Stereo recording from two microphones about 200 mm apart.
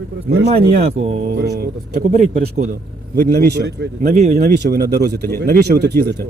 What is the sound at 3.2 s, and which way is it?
Speech, 55° right (ahead or behind).